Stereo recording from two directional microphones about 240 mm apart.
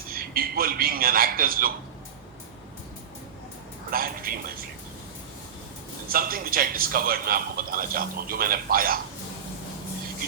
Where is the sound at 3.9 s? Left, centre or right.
Right.